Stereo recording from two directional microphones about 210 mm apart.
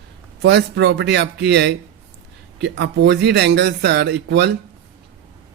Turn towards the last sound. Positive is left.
turn(degrees=-50)  # may be behind; listen again after turning